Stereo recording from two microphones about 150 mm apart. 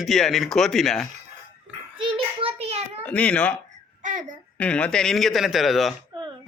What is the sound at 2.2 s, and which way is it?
Child singing, 40° right (ahead or behind).